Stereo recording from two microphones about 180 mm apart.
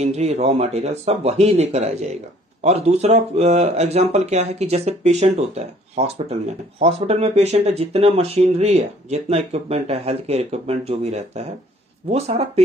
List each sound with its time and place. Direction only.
0.0 s speech: 35° right (ahead or behind)